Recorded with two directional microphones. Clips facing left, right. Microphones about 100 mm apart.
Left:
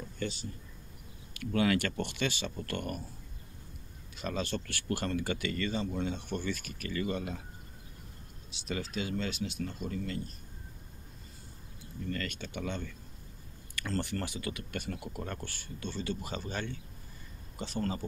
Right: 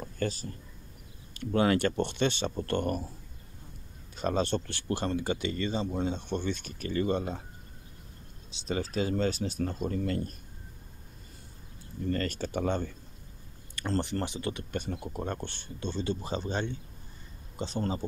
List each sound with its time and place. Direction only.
0.0 s a sound: 45° right (ahead or behind)
1.3 s speech: 35° right (ahead or behind)
4.1 s speech: 35° right (ahead or behind)
8.5 s speech: 30° right (ahead or behind); by 10.3 s 50° right (ahead or behind)
12.0 s speech: 35° right (ahead or behind)
13.7 s speech: 25° right (ahead or behind)